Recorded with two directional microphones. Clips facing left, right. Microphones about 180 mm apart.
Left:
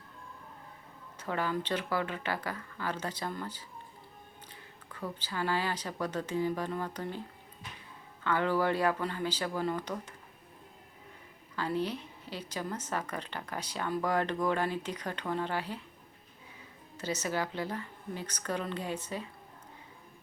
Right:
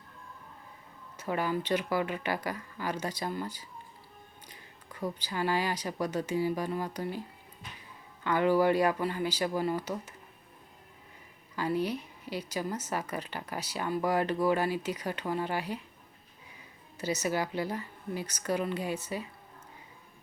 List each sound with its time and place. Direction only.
1.1 s a woman's voice: 10° right (ahead or behind)
8.2 s a woman's voice: 15° right (ahead or behind)
11.5 s a woman's voice: 10° right (ahead or behind)
17.0 s a woman's voice: 10° right (ahead or behind)